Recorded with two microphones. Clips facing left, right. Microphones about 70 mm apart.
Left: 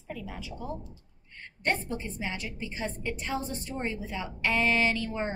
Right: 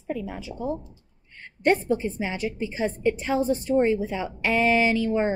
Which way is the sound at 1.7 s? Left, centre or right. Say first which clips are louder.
Right 9 dB; centre.